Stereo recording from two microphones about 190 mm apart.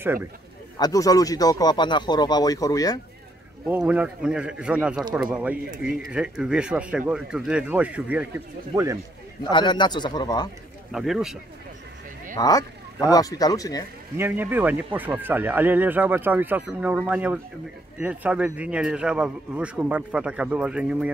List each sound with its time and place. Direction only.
0.7 s speech: 20° left (ahead or behind)
3.6 s speech: 5° right (ahead or behind)
9.4 s speech: 25° left (ahead or behind)
10.9 s speech: centre (ahead or behind)
12.4 s speech: 20° left (ahead or behind)
14.1 s speech: 10° right (ahead or behind)